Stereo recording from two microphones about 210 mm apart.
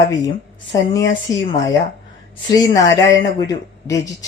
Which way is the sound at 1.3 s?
15° left (ahead or behind).